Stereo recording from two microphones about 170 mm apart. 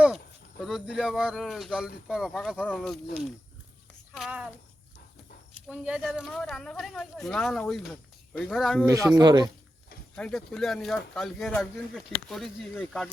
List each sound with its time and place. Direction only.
0.6 s speech: centre (ahead or behind)
4.1 s speech: 5° right (ahead or behind)
5.6 s speech: 5° right (ahead or behind)
8.9 s speech: 20° right (ahead or behind)
10.2 s speech: 5° left (ahead or behind)